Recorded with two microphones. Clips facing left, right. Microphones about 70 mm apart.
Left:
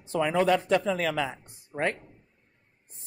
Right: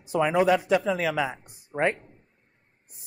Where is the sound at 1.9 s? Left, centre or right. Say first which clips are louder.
Even; right.